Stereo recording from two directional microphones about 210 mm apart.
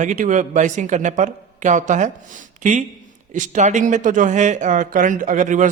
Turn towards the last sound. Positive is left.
turn(degrees=-35)  # may be behind; listen again after turning